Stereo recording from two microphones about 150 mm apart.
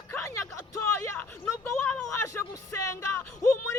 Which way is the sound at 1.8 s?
15° left (ahead or behind).